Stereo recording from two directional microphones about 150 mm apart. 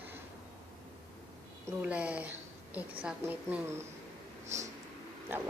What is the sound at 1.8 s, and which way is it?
Speech, 10° right (ahead or behind).